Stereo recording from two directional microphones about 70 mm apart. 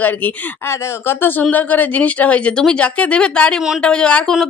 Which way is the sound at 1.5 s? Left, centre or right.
Left.